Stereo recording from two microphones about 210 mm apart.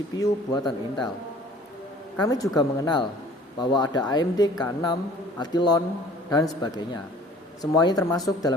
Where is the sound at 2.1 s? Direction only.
15° left (ahead or behind).